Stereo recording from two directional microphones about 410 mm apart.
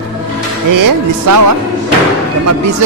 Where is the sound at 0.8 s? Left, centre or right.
Right.